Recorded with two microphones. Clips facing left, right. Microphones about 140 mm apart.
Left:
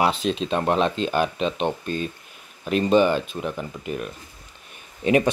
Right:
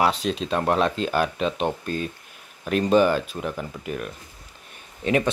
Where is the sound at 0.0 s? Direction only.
Centre (ahead or behind).